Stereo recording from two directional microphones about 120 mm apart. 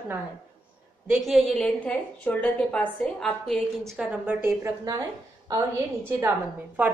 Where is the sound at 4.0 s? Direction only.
10° right (ahead or behind).